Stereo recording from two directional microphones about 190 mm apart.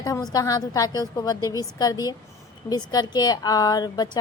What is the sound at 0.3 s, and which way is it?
A woman's voice, 20° left (ahead or behind).